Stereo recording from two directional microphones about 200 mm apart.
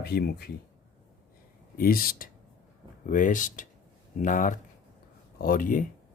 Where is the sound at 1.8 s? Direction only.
45° left (ahead or behind).